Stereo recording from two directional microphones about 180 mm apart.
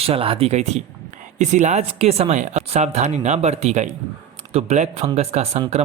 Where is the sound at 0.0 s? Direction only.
30° right (ahead or behind).